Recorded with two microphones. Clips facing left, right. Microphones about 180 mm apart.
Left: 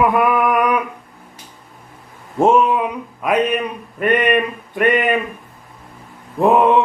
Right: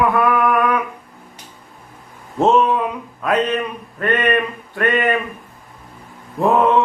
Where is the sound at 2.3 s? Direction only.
10° left (ahead or behind).